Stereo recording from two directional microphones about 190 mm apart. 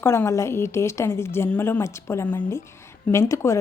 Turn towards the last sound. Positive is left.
turn(degrees=15)  # may be behind; listen again after turning